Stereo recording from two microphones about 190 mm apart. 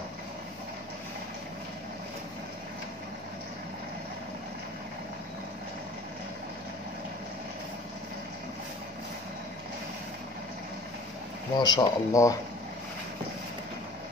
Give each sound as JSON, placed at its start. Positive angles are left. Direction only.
{"t": 11.5, "sound": "speech", "side_deg": 20}